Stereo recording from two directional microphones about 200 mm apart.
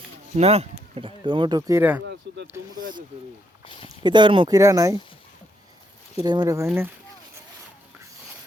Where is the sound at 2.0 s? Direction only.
60° right (ahead or behind).